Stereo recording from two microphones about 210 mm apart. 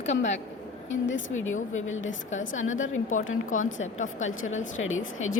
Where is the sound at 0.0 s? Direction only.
35° left (ahead or behind).